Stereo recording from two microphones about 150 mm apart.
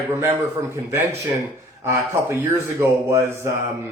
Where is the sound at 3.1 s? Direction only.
20° right (ahead or behind).